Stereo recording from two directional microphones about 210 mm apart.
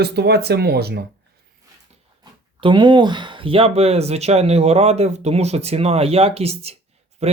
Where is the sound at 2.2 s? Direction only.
20° right (ahead or behind).